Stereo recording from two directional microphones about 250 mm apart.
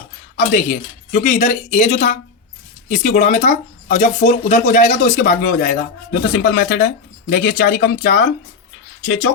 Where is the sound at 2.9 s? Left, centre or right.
Left.